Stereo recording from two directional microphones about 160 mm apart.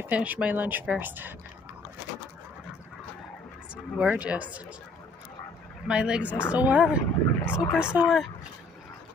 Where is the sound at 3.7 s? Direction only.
5° right (ahead or behind).